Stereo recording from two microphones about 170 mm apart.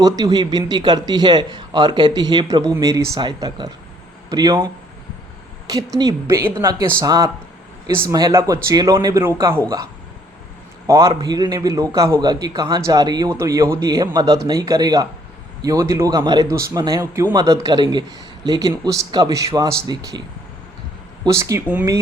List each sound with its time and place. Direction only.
0.0 s speech: 25° right (ahead or behind)
10.8 s speech: 20° right (ahead or behind)
21.2 s speech: 15° right (ahead or behind)